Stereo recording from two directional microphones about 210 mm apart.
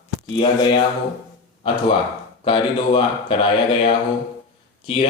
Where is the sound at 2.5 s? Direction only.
25° left (ahead or behind).